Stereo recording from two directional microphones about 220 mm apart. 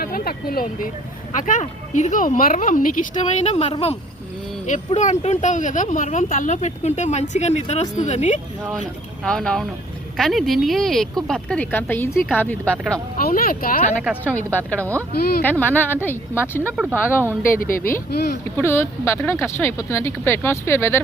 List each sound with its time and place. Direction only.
0.0 s speech: 40° left (ahead or behind)
9.2 s a woman's voice: 5° left (ahead or behind)
12.1 s a woman's voice: centre (ahead or behind)
13.1 s speech: 40° left (ahead or behind)
14.0 s speech: 5° right (ahead or behind)
14.5 s speech: 5° left (ahead or behind)
15.1 s speech: 45° left (ahead or behind)
15.4 s speech: 10° left (ahead or behind)
16.7 s speech: 5° right (ahead or behind)
17.6 s speech: 40° left (ahead or behind)
18.5 s speech: 10° left (ahead or behind)